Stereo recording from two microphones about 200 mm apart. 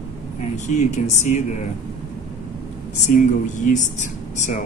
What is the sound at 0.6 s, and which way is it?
Speech, 35° left (ahead or behind).